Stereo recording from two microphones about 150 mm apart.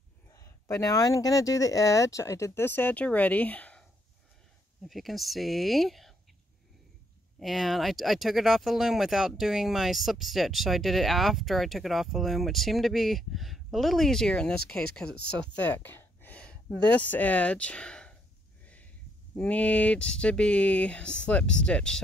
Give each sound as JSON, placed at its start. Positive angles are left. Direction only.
{"t": 0.3, "sound": "speech", "side_deg": 20}
{"t": 4.8, "sound": "speech", "side_deg": 0}
{"t": 7.3, "sound": "speech", "side_deg": 0}
{"t": 15.2, "sound": "a sound", "side_deg": 5}
{"t": 16.9, "sound": "speech", "side_deg": 10}
{"t": 19.3, "sound": "speech", "side_deg": 10}